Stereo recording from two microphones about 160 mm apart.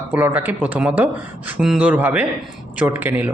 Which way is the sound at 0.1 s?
10° right (ahead or behind).